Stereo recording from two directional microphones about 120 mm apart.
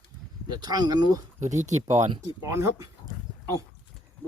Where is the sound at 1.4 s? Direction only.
85° right.